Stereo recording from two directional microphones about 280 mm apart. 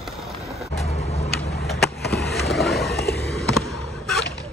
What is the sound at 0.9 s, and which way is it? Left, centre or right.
Vehicle, left.